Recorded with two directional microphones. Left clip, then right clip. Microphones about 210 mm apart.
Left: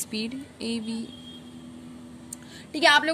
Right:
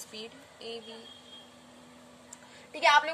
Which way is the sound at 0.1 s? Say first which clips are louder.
Left 11 dB; 50° left (ahead or behind).